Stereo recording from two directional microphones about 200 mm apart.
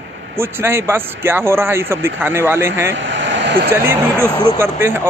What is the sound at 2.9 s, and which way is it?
Vehicle, 65° right (ahead or behind).